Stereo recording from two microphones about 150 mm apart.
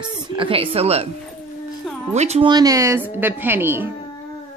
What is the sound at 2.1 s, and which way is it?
Speech, 45° right (ahead or behind).